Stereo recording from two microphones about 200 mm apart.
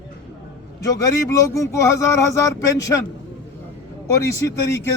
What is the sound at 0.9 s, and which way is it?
Speech, 15° left (ahead or behind).